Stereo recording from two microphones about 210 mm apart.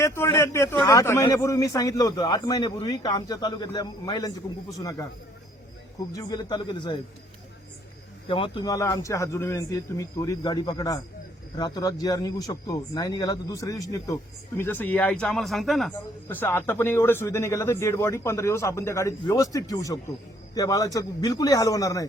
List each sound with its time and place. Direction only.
0.0 s a man's voice: 10° left (ahead or behind)
6.1 s a man's voice: 20° left (ahead or behind)
8.3 s speech: 25° left (ahead or behind)